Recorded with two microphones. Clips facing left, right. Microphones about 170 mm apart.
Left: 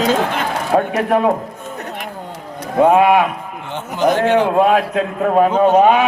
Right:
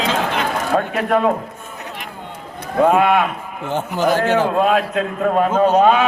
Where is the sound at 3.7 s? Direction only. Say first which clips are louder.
Right 5 dB; 40° right (ahead or behind).